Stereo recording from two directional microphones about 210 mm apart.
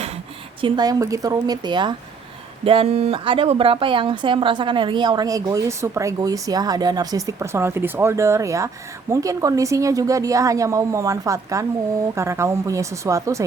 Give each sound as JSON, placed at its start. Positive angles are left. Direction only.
{"t": 0.6, "sound": "speech", "side_deg": -20}